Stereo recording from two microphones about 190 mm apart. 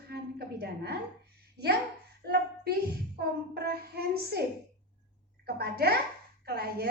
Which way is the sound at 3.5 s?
55° right (ahead or behind).